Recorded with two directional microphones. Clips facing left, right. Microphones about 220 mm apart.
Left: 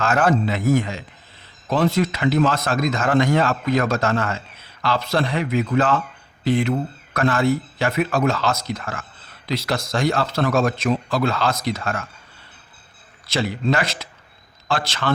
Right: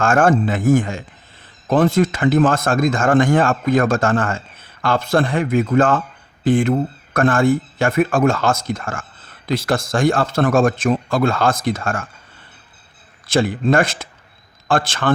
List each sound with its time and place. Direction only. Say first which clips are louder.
0.0 s speech: right 4 dB; 50° right (ahead or behind)
13.2 s speech: right 5 dB; 50° right (ahead or behind)